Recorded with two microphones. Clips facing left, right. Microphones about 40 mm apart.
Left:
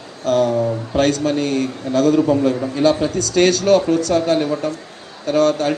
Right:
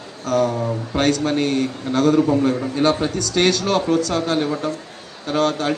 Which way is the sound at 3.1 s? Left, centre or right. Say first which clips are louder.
Left 3 dB; left.